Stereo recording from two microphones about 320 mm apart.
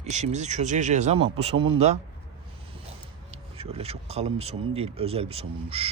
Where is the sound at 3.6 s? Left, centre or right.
Centre.